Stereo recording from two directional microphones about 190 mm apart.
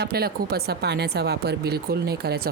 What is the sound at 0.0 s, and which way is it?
Speech, 55° right (ahead or behind).